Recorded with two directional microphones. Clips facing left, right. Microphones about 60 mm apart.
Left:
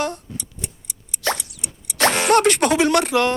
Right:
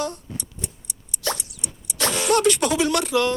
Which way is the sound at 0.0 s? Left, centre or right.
Left.